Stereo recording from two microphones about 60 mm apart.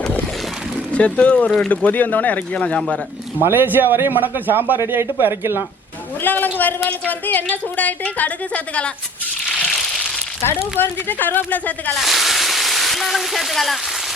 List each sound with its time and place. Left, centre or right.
0.9 s a woman's voice: left
1.5 s speech: centre
1.7 s a woman's voice: left
3.4 s speech: right
6.2 s a woman's voice: left
9.6 s a sound: centre
10.4 s speech: left
11.9 s a sound: centre